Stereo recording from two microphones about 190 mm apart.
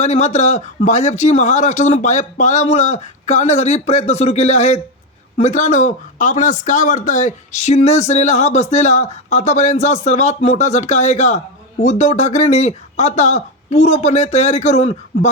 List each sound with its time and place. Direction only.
0.0 s a man's voice: 35° left (ahead or behind)